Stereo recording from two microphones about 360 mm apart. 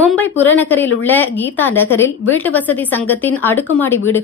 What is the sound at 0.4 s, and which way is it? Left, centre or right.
A woman's voice, centre.